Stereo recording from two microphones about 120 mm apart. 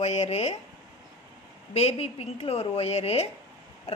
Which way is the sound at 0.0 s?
70° left (ahead or behind).